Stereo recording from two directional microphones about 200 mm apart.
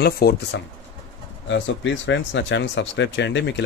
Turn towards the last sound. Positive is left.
turn(degrees=60)  # may be behind; listen again after turning